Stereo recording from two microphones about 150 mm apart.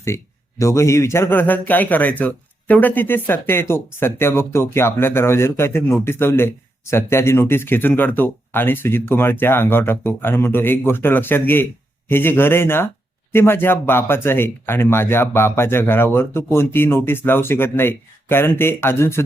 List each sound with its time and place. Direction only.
0.6 s a man's voice: 20° left (ahead or behind)